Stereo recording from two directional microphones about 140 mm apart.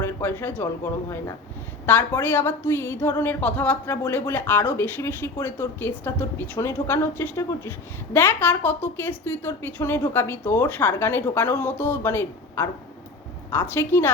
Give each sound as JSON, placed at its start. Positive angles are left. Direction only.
{"t": 0.0, "sound": "speech", "side_deg": 15}
{"t": 1.9, "sound": "a woman's voice", "side_deg": 15}